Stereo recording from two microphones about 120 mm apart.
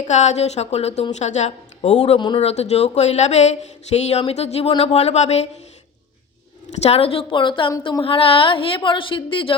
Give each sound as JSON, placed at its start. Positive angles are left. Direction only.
{"t": 0.1, "sound": "a woman's voice", "side_deg": 75}
{"t": 2.1, "sound": "speech", "side_deg": 40}
{"t": 2.4, "sound": "speech", "side_deg": 65}
{"t": 6.7, "sound": "a woman's voice", "side_deg": 60}